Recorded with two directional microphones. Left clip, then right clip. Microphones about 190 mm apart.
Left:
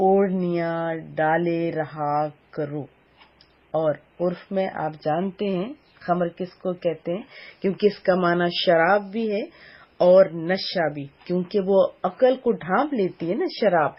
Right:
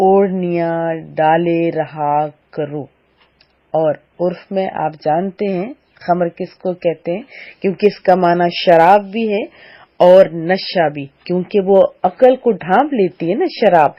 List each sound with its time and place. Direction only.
0.0 s speech: 30° right (ahead or behind)